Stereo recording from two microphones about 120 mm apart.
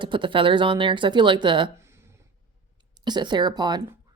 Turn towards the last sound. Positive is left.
turn(degrees=-35)  # may be behind; listen again after turning